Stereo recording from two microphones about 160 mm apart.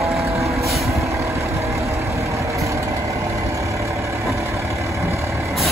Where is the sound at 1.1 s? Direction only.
20° right (ahead or behind).